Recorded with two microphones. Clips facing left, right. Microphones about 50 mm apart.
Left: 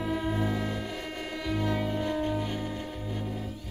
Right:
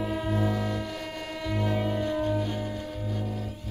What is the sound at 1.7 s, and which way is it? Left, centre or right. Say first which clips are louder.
Music: right 2 dB; centre.